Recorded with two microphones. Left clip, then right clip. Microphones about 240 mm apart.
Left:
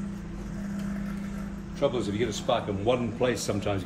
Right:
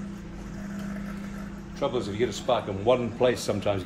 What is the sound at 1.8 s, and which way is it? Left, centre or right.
A man's voice, right.